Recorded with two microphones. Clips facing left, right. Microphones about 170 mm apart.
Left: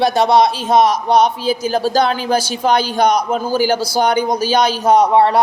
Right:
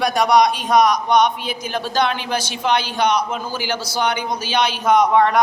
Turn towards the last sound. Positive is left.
turn(degrees=30)  # may be behind; listen again after turning